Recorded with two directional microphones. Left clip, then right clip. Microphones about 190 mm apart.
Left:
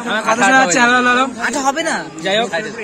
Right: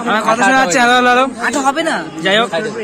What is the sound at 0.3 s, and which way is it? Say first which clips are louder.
Speech: left 1 dB; 15° right (ahead or behind).